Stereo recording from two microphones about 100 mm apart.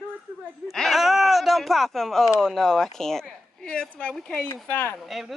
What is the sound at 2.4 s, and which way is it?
Speech, 5° left (ahead or behind).